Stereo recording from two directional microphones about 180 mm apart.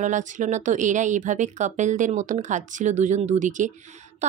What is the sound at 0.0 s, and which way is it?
A woman's voice, 45° right (ahead or behind).